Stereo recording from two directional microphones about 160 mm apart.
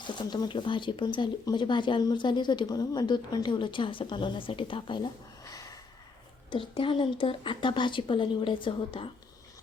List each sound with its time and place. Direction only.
0.1 s speech: 25° left (ahead or behind)
5.5 s a sound: 20° left (ahead or behind)
6.5 s a woman's voice: 35° left (ahead or behind)